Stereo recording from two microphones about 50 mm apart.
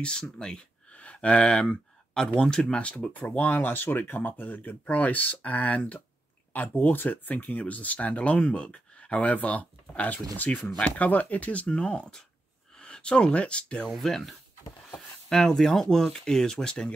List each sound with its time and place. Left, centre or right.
0.0 s speech: centre
3.3 s speech: left
14.0 s speech: centre